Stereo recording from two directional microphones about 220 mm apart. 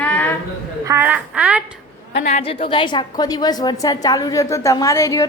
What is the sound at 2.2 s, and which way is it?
A woman's voice, 30° left (ahead or behind).